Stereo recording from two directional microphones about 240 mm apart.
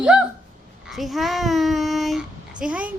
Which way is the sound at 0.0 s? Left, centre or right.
Centre.